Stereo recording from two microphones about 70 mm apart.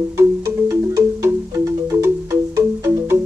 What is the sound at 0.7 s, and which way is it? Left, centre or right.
Music, right.